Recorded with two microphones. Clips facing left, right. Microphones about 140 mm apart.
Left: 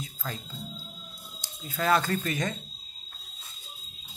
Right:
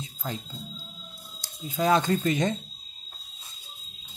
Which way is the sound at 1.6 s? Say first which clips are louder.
Right 2 dB; 15° right (ahead or behind).